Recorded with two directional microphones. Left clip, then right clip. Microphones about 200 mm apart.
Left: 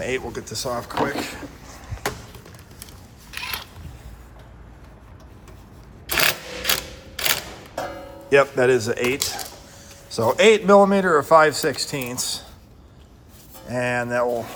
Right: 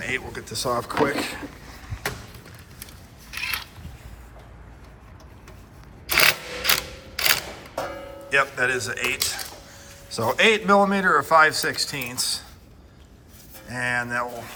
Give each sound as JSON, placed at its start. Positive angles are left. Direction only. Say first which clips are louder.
{"t": 0.0, "sound": "speech", "louder": "left 2 dB", "side_deg": 20}
{"t": 3.4, "sound": "a sound", "louder": "right 2 dB", "side_deg": 35}
{"t": 6.1, "sound": "camera", "louder": "right 2 dB", "side_deg": 0}
{"t": 7.8, "sound": "music", "louder": "left 1 dB", "side_deg": 0}
{"t": 8.3, "sound": "speech", "louder": "left 5 dB", "side_deg": 40}
{"t": 10.2, "sound": "a man's voice", "louder": "left 4 dB", "side_deg": 20}
{"t": 13.7, "sound": "a man's voice", "louder": "left 2 dB", "side_deg": 25}